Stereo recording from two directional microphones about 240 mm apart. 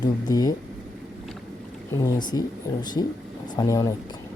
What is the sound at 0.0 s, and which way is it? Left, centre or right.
Speech, centre.